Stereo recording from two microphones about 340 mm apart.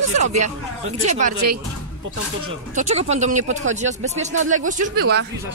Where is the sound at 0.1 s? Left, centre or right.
Centre.